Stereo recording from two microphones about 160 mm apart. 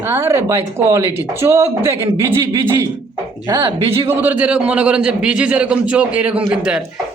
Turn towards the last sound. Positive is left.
turn(degrees=-5)  # may be behind; listen again after turning